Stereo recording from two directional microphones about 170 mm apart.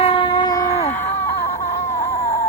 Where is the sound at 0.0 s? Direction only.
30° left (ahead or behind).